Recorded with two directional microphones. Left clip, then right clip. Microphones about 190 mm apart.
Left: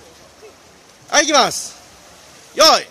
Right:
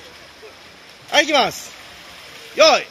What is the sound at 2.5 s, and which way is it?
Speech, 15° left (ahead or behind).